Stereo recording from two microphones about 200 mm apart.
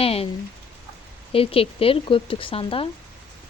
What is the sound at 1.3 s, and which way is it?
Speech, 30° left (ahead or behind).